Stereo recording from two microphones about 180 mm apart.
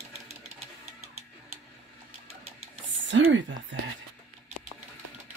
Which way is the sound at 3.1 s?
90° right.